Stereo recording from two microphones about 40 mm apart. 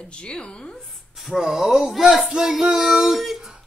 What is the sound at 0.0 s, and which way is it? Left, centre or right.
Speech, left.